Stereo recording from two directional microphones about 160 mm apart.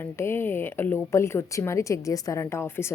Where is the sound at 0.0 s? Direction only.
15° left (ahead or behind).